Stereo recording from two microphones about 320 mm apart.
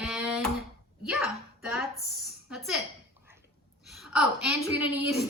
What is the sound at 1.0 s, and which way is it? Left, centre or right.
A woman's voice, centre.